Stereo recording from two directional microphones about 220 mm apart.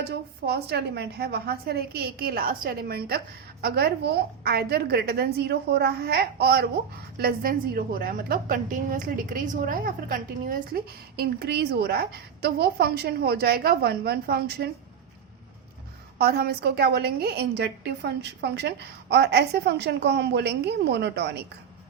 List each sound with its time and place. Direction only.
0.0 s a woman's voice: 45° right (ahead or behind)
16.1 s a woman's voice: 45° right (ahead or behind)